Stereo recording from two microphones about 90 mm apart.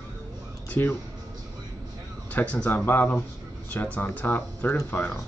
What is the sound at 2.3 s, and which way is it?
Speech, 15° left (ahead or behind).